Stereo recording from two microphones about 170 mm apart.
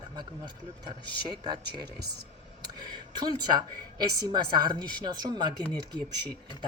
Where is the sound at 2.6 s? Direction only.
25° right (ahead or behind).